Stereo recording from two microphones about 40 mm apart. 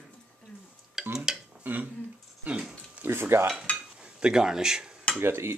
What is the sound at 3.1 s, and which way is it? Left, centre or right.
Cutlery, right.